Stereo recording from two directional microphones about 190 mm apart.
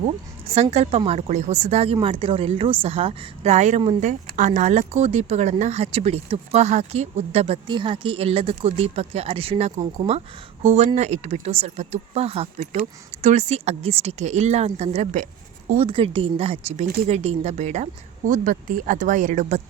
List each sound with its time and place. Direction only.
0.5 s a woman's voice: 35° right (ahead or behind)